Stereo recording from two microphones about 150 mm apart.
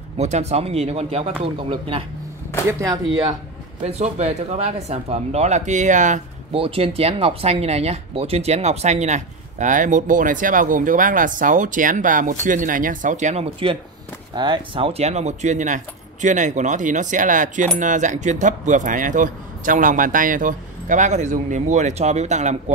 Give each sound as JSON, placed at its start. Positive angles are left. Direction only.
{"t": 0.2, "sound": "speech", "side_deg": -45}
{"t": 2.8, "sound": "speech", "side_deg": -25}
{"t": 3.8, "sound": "speech", "side_deg": -45}
{"t": 6.5, "sound": "speech", "side_deg": -40}